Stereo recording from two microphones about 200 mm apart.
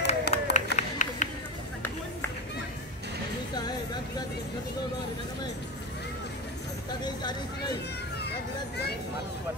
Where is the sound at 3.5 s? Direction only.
20° left (ahead or behind).